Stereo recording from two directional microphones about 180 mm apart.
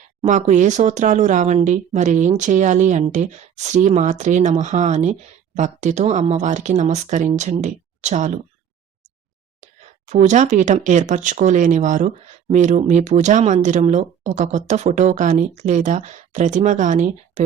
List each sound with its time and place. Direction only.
0.2 s speech: 40° right (ahead or behind)
10.1 s speech: 40° right (ahead or behind)